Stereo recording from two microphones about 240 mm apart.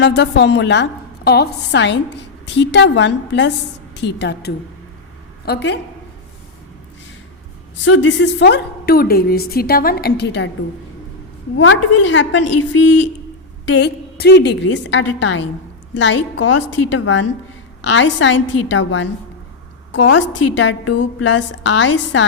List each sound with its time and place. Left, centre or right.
0.0 s a woman's voice: left
7.9 s a woman's voice: left
11.5 s a woman's voice: left